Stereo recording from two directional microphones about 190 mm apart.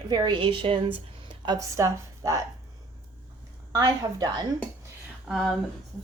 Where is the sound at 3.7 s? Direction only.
20° right (ahead or behind).